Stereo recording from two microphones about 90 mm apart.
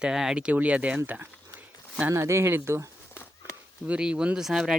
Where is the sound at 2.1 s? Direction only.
30° right (ahead or behind).